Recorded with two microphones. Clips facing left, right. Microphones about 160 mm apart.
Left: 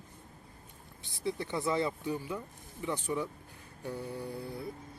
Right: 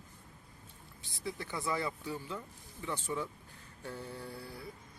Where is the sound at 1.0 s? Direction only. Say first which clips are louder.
Left 6 dB; 20° left (ahead or behind).